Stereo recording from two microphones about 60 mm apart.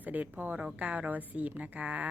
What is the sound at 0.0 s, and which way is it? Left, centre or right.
Speech, right.